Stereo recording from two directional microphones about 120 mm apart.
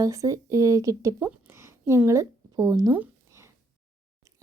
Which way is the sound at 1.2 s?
20° right (ahead or behind).